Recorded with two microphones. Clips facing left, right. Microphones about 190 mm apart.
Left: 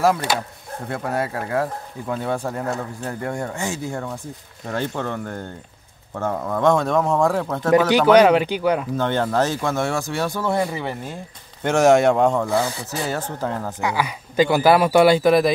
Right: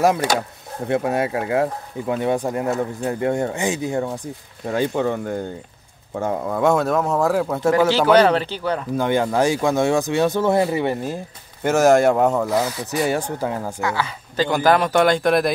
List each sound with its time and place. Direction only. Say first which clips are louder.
0.8 s speech: right 5 dB; 20° right (ahead or behind)
8.1 s a man's voice: left 5 dB; 10° left (ahead or behind)
8.9 s speech: right 1 dB; 10° right (ahead or behind); by 10.9 s 25° right (ahead or behind)
11.6 s speech: even; centre (ahead or behind)
13.7 s a man's voice: even; 15° left (ahead or behind)